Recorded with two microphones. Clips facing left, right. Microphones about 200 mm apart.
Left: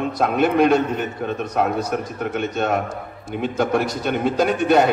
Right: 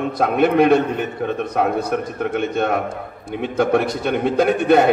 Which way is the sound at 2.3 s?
55° right (ahead or behind).